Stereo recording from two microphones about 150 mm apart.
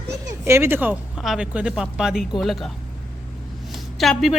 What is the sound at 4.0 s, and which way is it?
Speech, centre (ahead or behind).